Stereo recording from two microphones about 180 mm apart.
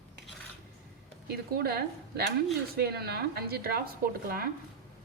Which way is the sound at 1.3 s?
60° right (ahead or behind).